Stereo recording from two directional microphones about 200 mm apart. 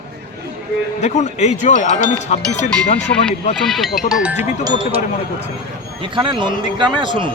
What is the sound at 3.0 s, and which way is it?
Speech, 5° left (ahead or behind).